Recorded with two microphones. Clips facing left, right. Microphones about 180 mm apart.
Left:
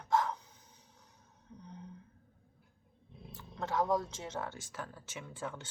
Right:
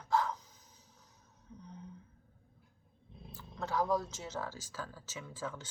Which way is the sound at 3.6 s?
25° left (ahead or behind).